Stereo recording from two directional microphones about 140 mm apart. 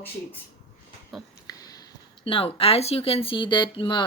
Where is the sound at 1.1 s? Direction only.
Centre (ahead or behind).